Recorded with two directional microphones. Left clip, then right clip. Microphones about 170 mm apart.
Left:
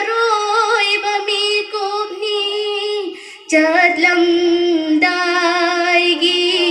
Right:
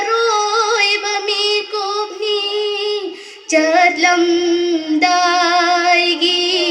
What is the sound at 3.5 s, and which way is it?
Female singing, 35° right (ahead or behind).